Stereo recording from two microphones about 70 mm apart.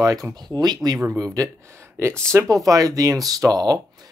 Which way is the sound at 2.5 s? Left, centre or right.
Right.